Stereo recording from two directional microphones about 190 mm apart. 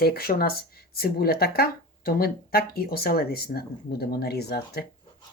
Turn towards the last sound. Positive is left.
turn(degrees=60)  # may be behind; listen again after turning